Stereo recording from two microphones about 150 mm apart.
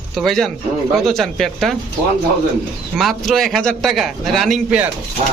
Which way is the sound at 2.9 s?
Centre (ahead or behind).